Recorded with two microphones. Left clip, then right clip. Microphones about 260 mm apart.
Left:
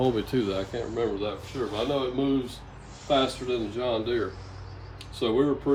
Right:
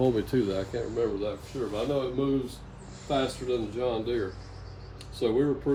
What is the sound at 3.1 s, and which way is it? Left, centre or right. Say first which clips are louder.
Speech: left 3 dB; centre.